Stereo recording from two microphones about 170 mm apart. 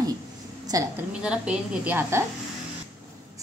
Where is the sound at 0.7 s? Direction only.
20° right (ahead or behind).